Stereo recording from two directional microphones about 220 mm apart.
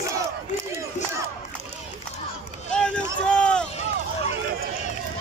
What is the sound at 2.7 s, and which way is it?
Run, 5° left (ahead or behind).